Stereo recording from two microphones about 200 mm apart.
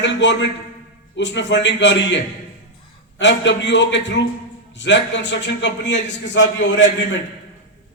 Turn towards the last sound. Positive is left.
turn(degrees=65)  # may be behind; listen again after turning